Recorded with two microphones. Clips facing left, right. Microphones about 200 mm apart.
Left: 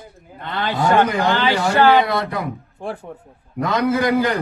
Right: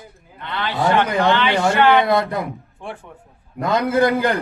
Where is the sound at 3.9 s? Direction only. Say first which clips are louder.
Right 1 dB; 55° right (ahead or behind).